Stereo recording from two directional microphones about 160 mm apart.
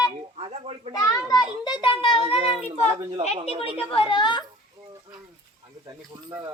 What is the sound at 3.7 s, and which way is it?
Speech, 35° left (ahead or behind).